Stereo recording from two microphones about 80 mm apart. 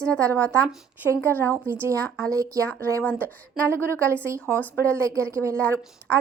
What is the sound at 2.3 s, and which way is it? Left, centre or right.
Speech, right.